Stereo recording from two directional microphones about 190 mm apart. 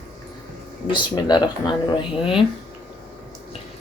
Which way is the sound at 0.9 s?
25° left (ahead or behind).